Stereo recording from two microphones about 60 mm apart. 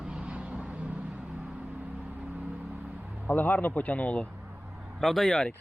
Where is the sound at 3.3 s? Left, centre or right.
Left.